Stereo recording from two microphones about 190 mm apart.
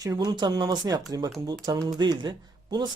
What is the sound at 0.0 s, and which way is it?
Speech, 20° right (ahead or behind).